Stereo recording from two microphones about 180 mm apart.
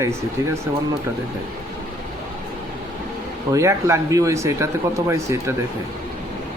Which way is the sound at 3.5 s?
15° right (ahead or behind).